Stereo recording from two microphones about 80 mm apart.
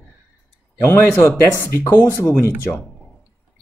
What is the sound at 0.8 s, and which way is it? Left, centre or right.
Speech, left.